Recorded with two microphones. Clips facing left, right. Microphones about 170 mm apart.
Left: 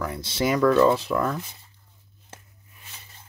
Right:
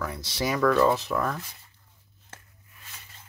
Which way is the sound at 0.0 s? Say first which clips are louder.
Left 4 dB; 25° left (ahead or behind).